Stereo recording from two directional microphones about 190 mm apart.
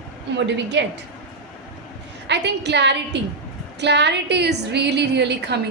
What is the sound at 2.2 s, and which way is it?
A woman's voice, 65° right (ahead or behind).